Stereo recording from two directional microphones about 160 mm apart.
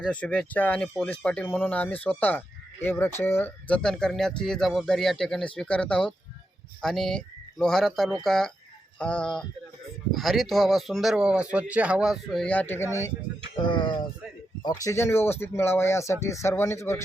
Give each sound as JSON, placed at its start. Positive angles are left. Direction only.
{"t": 0.0, "sound": "speech", "side_deg": 10}
{"t": 13.6, "sound": "a sound", "side_deg": 30}
{"t": 14.6, "sound": "speech", "side_deg": 20}